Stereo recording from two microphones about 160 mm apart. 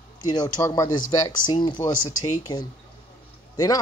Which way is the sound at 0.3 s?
20° left (ahead or behind).